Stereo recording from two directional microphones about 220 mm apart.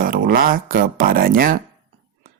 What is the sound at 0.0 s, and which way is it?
Speech, 40° right (ahead or behind).